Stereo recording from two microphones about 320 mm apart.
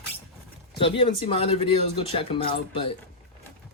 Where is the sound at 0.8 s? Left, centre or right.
Centre.